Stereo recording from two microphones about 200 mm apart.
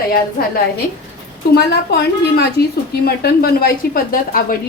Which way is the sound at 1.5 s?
55° left (ahead or behind).